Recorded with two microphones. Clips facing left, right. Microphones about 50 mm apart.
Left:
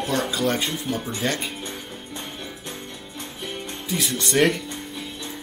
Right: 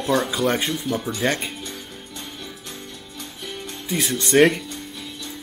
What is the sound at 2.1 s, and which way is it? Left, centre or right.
Music, centre.